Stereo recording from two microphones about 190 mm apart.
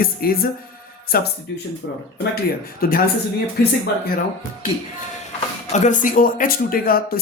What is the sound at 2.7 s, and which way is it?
Speech, 50° left (ahead or behind).